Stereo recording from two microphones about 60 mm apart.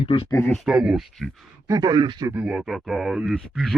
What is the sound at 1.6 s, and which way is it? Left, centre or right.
Speech, right.